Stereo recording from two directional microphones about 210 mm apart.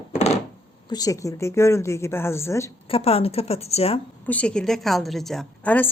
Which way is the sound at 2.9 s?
25° left (ahead or behind).